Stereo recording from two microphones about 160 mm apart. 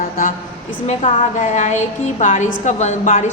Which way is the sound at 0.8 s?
45° left (ahead or behind).